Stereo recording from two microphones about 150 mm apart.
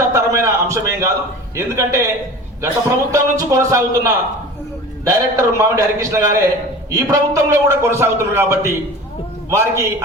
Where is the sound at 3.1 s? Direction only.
20° right (ahead or behind).